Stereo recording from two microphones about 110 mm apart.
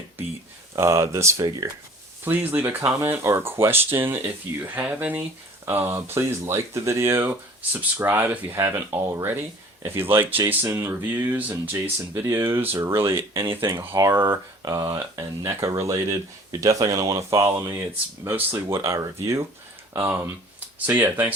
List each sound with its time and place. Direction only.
0.8 s speech: 25° right (ahead or behind)
2.2 s speech: 15° right (ahead or behind)